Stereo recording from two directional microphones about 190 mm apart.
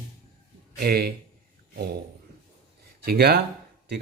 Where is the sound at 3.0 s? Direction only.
55° right (ahead or behind).